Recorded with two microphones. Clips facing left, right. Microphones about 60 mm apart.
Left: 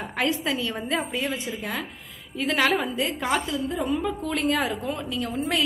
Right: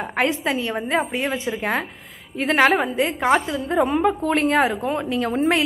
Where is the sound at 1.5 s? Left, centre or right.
Right.